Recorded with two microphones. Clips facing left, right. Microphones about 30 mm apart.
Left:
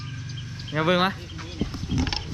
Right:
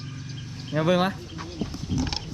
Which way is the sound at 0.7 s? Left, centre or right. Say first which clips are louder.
Left 1 dB; left.